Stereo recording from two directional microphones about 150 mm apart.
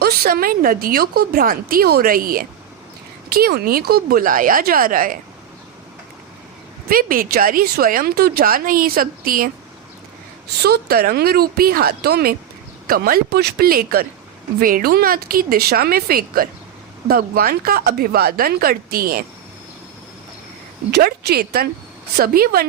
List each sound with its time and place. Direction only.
0.0 s a woman's voice: 85° right
3.2 s speech: 90° right; by 5.1 s 70° right (ahead or behind)
6.8 s speech: 70° right (ahead or behind)
10.6 s a woman's voice: 90° right
20.9 s a woman's voice: 90° right